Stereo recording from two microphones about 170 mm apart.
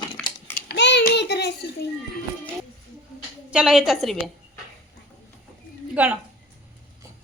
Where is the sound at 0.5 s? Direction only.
80° left.